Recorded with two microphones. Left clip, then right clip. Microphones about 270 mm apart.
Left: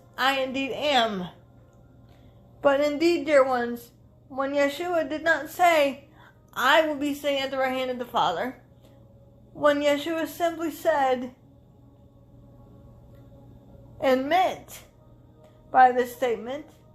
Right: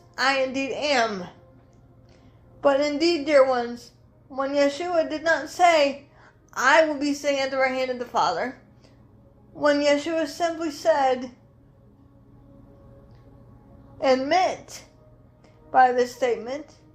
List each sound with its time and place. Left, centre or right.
0.2 s a woman's voice: left
2.6 s a woman's voice: left
9.6 s a woman's voice: left
14.0 s a woman's voice: left